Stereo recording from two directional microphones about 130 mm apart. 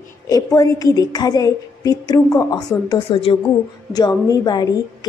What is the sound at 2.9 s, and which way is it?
Speech, 45° left (ahead or behind).